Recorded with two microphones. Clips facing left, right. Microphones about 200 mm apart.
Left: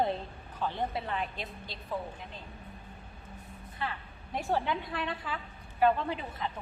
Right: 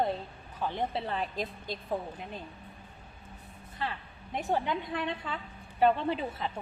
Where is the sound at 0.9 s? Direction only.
35° right (ahead or behind).